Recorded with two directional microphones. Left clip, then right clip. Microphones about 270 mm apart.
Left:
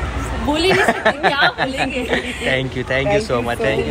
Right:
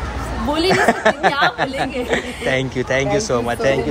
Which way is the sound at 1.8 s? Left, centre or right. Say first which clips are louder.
Left 1 dB; right.